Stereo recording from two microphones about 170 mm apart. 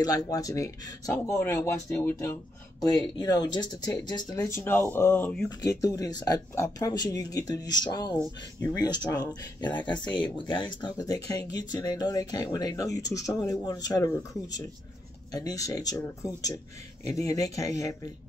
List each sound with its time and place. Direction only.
0.0 s speech: 20° left (ahead or behind)
15.3 s speech: 20° left (ahead or behind)